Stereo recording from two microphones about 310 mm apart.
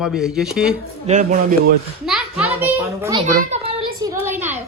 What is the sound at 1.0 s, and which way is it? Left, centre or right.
Speech, right.